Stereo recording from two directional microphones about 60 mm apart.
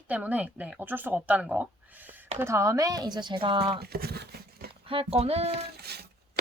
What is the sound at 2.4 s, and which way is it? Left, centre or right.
Speech, right.